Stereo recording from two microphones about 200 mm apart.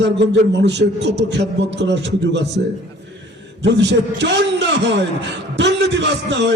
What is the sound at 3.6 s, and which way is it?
A man's voice, 60° right (ahead or behind).